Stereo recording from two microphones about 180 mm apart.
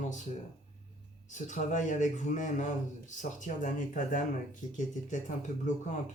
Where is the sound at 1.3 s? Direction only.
45° left (ahead or behind).